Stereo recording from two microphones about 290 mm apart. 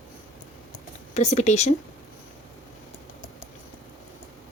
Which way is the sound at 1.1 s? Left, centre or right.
Left.